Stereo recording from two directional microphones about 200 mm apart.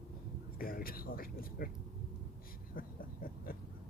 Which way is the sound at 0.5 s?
45° left (ahead or behind).